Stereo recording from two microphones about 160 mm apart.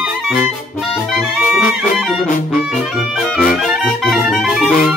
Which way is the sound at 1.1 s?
Centre (ahead or behind).